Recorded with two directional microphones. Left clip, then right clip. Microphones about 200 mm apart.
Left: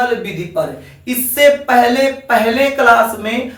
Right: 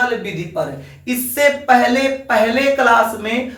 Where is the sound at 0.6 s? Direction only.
5° right (ahead or behind).